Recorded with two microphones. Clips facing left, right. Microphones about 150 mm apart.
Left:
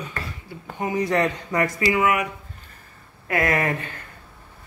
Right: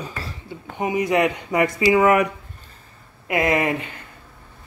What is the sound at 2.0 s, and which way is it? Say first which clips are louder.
Speech: right 6 dB; 40° right (ahead or behind).